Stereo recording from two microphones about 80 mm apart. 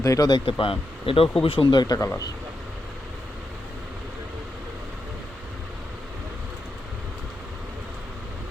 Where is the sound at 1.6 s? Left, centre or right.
Left.